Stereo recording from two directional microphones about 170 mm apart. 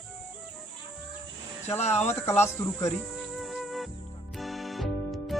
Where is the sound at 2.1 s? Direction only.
15° left (ahead or behind).